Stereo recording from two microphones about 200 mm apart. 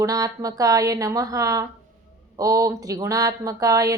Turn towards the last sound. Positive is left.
turn(degrees=-15)  # may be behind; listen again after turning